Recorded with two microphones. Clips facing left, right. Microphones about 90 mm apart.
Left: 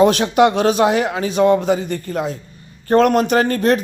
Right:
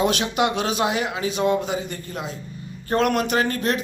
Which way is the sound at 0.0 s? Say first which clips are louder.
Left 8 dB; 40° left (ahead or behind).